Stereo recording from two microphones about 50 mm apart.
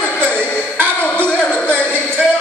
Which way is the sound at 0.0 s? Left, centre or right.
Left.